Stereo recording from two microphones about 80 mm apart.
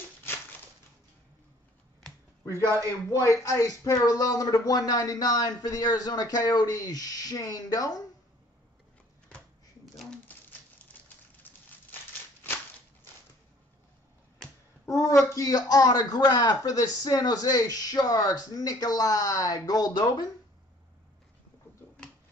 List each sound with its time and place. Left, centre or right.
2.4 s speech: right
3.1 s speech: left
10.9 s a sound: left
11.4 s crushing: left
14.9 s speech: left